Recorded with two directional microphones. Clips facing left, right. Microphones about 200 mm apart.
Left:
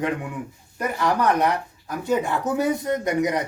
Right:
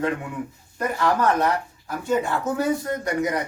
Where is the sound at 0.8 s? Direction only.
15° left (ahead or behind).